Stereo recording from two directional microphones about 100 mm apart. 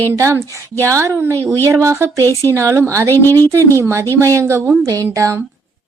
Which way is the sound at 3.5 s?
30° right (ahead or behind).